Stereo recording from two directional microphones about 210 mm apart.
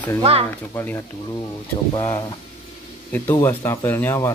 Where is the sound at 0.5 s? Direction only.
10° left (ahead or behind).